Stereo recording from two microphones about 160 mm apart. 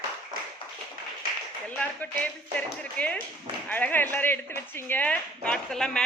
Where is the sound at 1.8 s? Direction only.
10° left (ahead or behind).